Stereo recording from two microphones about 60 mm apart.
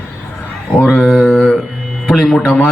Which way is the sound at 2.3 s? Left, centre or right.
Centre.